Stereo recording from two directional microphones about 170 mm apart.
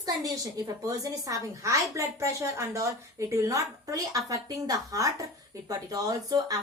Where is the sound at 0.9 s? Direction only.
20° right (ahead or behind).